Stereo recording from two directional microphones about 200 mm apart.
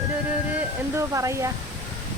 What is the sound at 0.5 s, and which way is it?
Speech, 15° right (ahead or behind).